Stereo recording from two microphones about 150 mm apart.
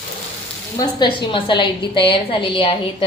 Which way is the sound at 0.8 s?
30° left (ahead or behind).